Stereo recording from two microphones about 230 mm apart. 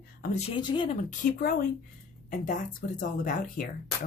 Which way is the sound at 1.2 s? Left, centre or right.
Left.